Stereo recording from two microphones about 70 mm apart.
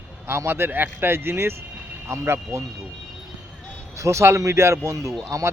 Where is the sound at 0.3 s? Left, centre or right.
Right.